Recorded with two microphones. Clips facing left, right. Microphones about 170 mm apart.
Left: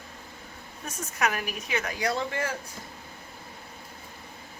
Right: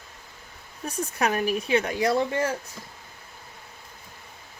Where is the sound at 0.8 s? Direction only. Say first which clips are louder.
Right 3 dB; 30° right (ahead or behind).